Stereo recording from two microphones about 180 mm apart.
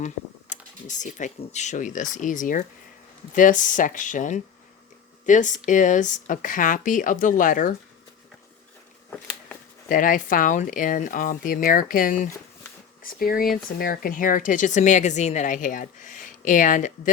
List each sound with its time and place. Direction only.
0.5 s speech: 45° left (ahead or behind)
9.0 s a sound: 10° left (ahead or behind)
9.9 s speech: 50° left (ahead or behind)